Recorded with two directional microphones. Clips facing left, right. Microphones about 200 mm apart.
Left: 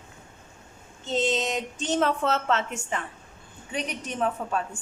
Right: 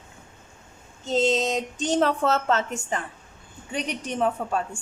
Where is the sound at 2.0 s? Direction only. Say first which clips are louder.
Right 1 dB; 40° right (ahead or behind).